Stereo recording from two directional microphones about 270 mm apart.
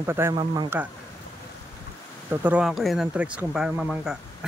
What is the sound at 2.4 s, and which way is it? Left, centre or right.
Speech, centre.